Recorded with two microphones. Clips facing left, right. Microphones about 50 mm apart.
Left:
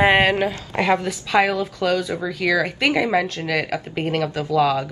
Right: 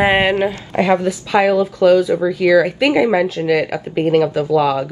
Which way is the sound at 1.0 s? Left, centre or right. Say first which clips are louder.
Right 4 dB; centre.